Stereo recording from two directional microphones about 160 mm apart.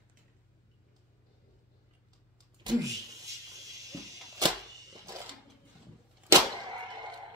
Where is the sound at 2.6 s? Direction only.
20° right (ahead or behind).